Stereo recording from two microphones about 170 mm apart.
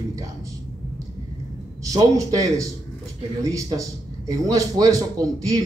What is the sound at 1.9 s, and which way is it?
Speech, 20° right (ahead or behind).